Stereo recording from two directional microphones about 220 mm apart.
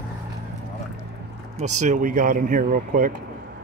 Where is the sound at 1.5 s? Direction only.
35° right (ahead or behind).